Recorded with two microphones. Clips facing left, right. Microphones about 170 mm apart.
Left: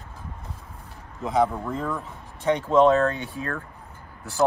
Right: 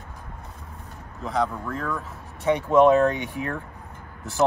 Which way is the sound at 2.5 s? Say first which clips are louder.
Right 1 dB; 10° right (ahead or behind).